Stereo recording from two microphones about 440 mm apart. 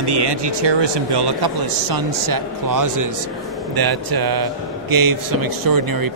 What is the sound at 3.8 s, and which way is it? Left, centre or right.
Speech, right.